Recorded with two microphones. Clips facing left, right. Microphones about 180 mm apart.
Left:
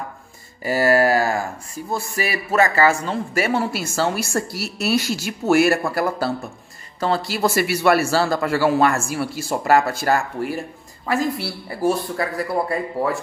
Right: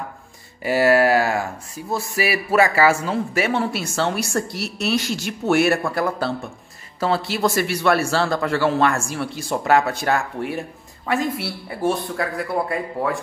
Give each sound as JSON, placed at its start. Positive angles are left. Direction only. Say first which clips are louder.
{"t": 0.6, "sound": "a man's voice", "louder": "right 1 dB", "side_deg": 0}